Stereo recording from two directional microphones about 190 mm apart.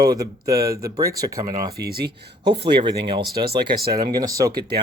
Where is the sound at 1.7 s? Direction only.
55° right (ahead or behind).